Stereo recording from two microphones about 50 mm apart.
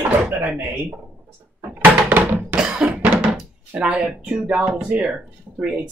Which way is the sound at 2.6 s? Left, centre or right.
Right.